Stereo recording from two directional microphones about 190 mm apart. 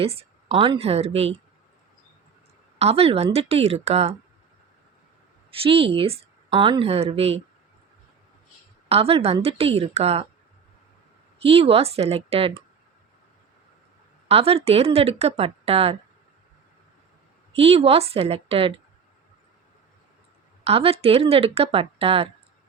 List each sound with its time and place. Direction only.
0.0 s speech: 30° right (ahead or behind)
2.7 s speech: 30° right (ahead or behind)
5.5 s a woman's voice: 30° right (ahead or behind)
8.9 s speech: 30° right (ahead or behind)
11.4 s speech: 30° right (ahead or behind)
14.3 s speech: 30° right (ahead or behind)
17.5 s speech: 30° right (ahead or behind)
20.7 s speech: 30° right (ahead or behind)